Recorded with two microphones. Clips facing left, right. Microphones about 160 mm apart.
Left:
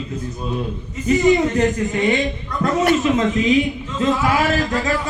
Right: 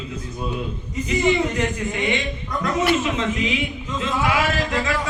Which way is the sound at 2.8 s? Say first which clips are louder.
Left 5 dB; 40° left (ahead or behind).